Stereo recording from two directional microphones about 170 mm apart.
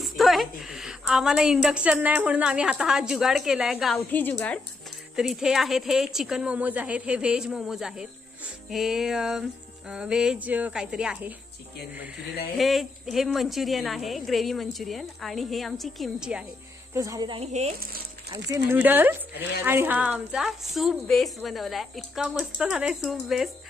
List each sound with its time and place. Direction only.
0.0 s a woman's voice: centre (ahead or behind)
3.9 s a woman's voice: 10° left (ahead or behind); by 11.3 s 5° right (ahead or behind)
12.5 s a woman's voice: centre (ahead or behind)
16.9 s speech: 20° right (ahead or behind); by 17.7 s 40° right (ahead or behind)
18.5 s a woman's voice: 15° right (ahead or behind)